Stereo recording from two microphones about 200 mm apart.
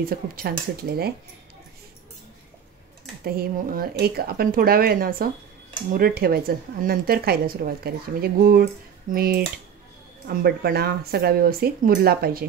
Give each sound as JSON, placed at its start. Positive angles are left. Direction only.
{"t": 0.0, "sound": "speech", "side_deg": -50}
{"t": 3.3, "sound": "speech", "side_deg": -45}